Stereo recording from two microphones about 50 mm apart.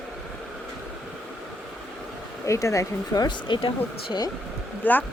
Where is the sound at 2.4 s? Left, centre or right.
Left.